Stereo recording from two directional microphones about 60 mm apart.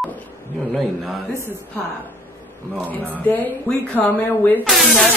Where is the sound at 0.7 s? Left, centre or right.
Centre.